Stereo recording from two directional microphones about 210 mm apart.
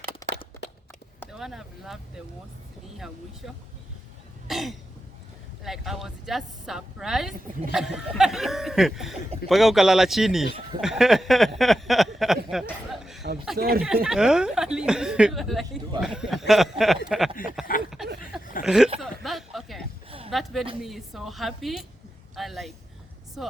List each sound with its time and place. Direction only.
1.3 s speech: centre (ahead or behind)
4.4 s cough: centre (ahead or behind)
5.6 s speech: centre (ahead or behind)
12.6 s a sound: centre (ahead or behind)
13.6 s speech: 45° right (ahead or behind)
13.8 s speech: centre (ahead or behind)
18.2 s chuckle: 40° left (ahead or behind)
18.6 s speech: centre (ahead or behind)
18.9 s a sound: centre (ahead or behind)
20.1 s a sound: 25° right (ahead or behind)
20.3 s speech: centre (ahead or behind)